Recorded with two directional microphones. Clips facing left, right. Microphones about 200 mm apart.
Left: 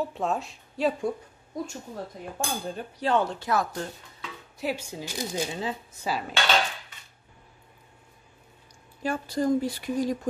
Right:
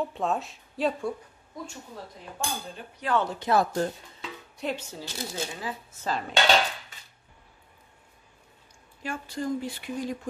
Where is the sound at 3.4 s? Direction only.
25° right (ahead or behind).